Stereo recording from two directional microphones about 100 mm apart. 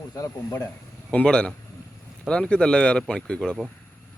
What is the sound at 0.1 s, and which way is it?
Speech, 30° left (ahead or behind).